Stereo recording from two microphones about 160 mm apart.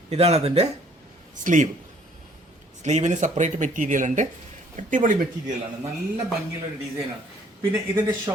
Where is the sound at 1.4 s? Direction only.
50° right (ahead or behind).